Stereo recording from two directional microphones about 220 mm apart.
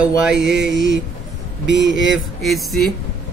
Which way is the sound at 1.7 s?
55° right (ahead or behind).